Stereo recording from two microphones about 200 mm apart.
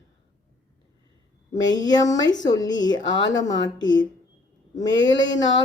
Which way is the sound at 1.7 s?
20° left (ahead or behind).